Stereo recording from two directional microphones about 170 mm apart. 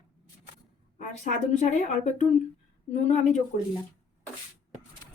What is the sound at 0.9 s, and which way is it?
A woman's voice, 45° left (ahead or behind).